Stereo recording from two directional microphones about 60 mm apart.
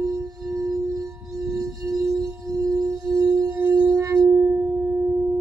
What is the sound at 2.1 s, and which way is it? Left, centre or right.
Singing bowl, right.